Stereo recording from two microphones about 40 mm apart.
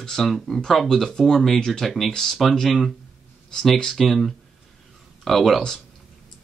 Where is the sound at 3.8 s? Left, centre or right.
Centre.